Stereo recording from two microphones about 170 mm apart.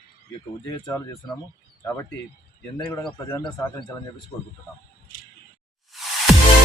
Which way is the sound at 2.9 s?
20° left (ahead or behind).